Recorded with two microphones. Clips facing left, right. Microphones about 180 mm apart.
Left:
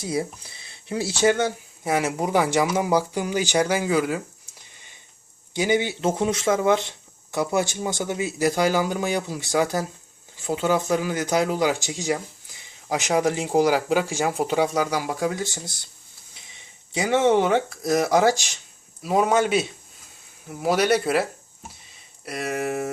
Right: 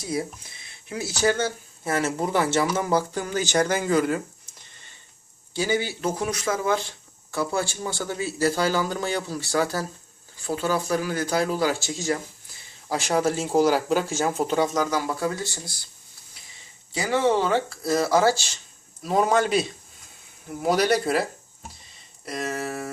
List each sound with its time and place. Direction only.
0.0 s speech: 25° left (ahead or behind); by 4.2 s 5° left (ahead or behind)
5.5 s speech: 20° left (ahead or behind)
19.0 s speech: 5° left (ahead or behind)
22.3 s speech: 10° left (ahead or behind)